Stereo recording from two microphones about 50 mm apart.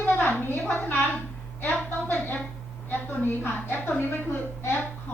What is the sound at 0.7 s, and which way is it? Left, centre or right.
Speech, left.